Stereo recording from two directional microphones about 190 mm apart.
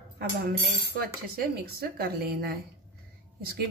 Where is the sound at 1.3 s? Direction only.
55° right (ahead or behind).